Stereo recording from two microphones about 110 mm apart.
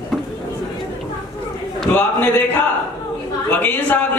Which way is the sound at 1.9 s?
20° left (ahead or behind).